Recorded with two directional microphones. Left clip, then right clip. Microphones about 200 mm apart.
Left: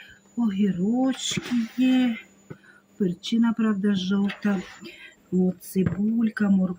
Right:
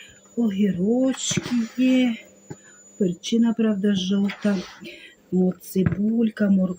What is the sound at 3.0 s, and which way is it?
Speech, 15° left (ahead or behind).